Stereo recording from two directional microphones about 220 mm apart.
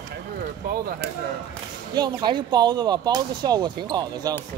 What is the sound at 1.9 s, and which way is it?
Speech, 20° right (ahead or behind).